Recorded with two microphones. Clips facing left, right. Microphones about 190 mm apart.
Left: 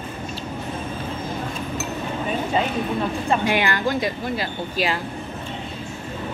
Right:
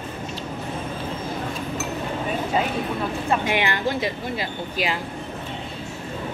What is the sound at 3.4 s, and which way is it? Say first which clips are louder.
Speech: left 2 dB; 20° right (ahead or behind).